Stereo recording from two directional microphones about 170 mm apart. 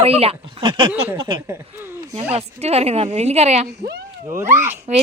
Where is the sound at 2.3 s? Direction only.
40° right (ahead or behind).